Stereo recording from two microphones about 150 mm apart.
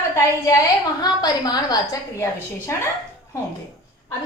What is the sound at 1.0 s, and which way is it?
Speech, 25° left (ahead or behind).